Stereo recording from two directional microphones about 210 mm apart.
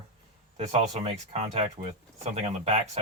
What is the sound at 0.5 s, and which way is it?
Speech, 30° right (ahead or behind).